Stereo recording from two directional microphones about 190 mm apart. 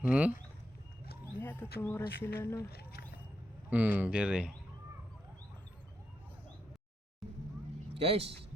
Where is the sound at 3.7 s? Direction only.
5° right (ahead or behind).